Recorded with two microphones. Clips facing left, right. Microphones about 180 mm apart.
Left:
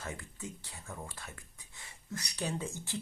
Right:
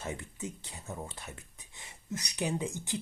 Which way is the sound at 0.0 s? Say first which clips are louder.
Right 4 dB; 20° right (ahead or behind).